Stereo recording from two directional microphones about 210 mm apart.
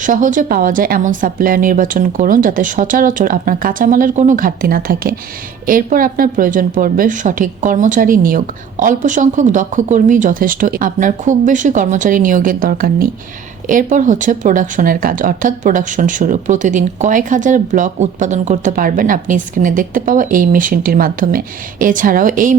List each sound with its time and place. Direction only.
0.0 s a woman's voice: 40° right (ahead or behind)